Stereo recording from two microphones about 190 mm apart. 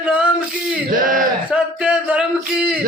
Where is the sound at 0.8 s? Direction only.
45° right (ahead or behind).